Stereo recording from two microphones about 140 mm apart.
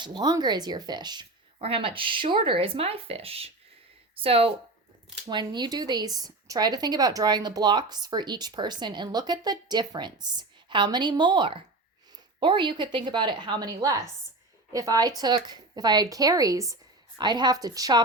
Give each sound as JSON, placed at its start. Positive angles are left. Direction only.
{"t": 0.0, "sound": "speech", "side_deg": -30}
{"t": 5.3, "sound": "a woman's voice", "side_deg": -30}